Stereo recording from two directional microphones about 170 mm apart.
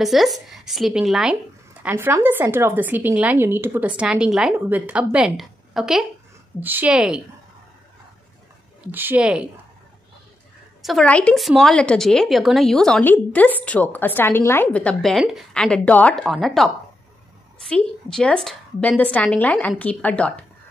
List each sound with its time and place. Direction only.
0.0 s a woman's voice: centre (ahead or behind)
8.8 s a woman's voice: 10° right (ahead or behind)
10.8 s a woman's voice: centre (ahead or behind)